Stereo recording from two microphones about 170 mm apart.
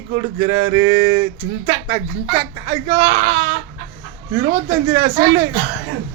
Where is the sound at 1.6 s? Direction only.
30° right (ahead or behind).